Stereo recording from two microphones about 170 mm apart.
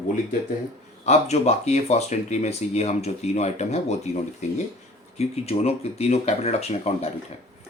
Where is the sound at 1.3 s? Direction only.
40° left (ahead or behind).